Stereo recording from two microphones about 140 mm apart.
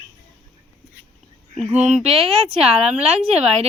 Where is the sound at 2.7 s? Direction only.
50° right (ahead or behind).